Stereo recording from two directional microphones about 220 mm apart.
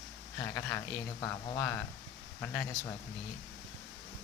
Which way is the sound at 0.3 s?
10° left (ahead or behind).